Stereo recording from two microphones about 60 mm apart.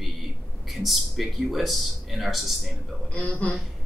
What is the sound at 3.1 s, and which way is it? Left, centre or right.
Speech, left.